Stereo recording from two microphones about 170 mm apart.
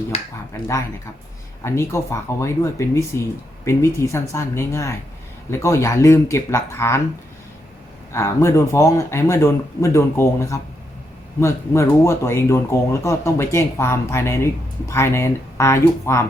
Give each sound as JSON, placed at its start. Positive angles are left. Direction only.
{"t": 0.5, "sound": "speech", "side_deg": 15}
{"t": 8.1, "sound": "speech", "side_deg": 15}